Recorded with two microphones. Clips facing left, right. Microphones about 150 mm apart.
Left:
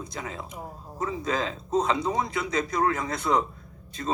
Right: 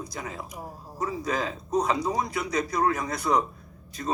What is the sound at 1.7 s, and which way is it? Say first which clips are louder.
A man's voice: even; 25° left (ahead or behind).